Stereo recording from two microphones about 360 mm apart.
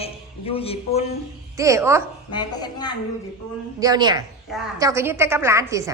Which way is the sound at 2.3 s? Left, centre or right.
Centre.